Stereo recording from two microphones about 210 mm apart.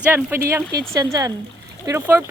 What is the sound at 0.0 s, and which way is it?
Speech, 10° right (ahead or behind).